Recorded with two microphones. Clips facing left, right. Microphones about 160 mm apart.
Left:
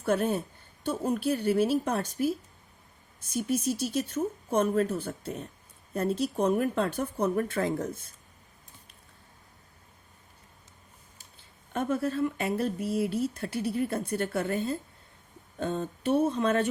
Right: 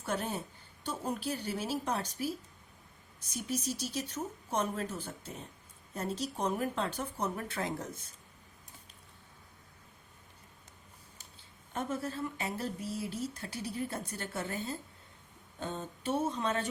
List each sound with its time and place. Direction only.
0.0 s speech: 60° left (ahead or behind)
11.7 s speech: 60° left (ahead or behind)
15.6 s speech: 55° left (ahead or behind)